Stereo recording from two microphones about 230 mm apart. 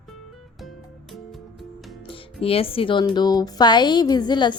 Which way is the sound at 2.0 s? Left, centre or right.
Left.